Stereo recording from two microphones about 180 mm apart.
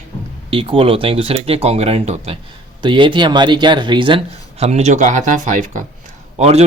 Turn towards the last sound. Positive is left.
turn(degrees=-35)  # may be behind; listen again after turning